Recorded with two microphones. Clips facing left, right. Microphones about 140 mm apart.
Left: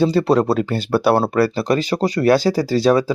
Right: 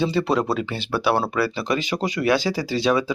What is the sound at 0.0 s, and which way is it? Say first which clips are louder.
Speech: left 6 dB; 40° left (ahead or behind).